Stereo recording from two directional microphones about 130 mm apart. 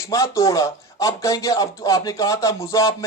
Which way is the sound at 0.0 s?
25° left (ahead or behind).